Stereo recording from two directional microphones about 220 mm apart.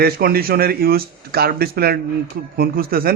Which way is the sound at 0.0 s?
45° right (ahead or behind).